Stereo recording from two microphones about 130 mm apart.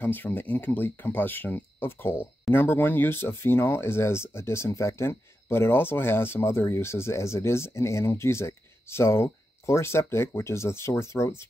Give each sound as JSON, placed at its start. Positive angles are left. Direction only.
{"t": 0.0, "sound": "speech", "side_deg": 15}